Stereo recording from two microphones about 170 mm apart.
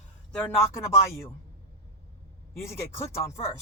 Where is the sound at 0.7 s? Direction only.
15° left (ahead or behind).